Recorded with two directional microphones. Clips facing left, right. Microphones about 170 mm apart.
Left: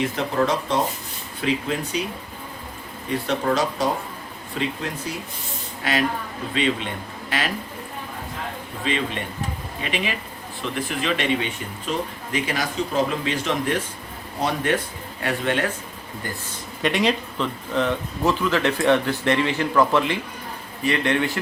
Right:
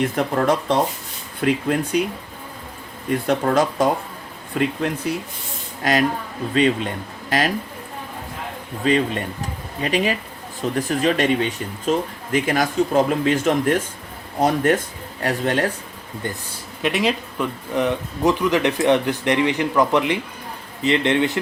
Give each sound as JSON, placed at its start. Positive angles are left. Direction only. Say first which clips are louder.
{"t": 0.0, "sound": "speech", "louder": "right 2 dB", "side_deg": -55}
{"t": 3.2, "sound": "speech", "louder": "right 4 dB", "side_deg": -50}
{"t": 5.8, "sound": "speech", "louder": "right 4 dB", "side_deg": -40}
{"t": 8.8, "sound": "speech", "louder": "right 7 dB", "side_deg": -45}
{"t": 16.8, "sound": "speech", "louder": "even", "side_deg": 0}